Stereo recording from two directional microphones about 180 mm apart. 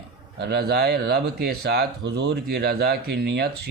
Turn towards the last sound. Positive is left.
turn(degrees=-65)  # may be behind; listen again after turning